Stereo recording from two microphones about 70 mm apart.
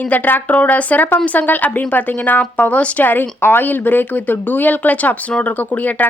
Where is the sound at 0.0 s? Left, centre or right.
Left.